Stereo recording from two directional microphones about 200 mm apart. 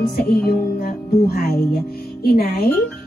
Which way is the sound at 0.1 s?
50° left (ahead or behind).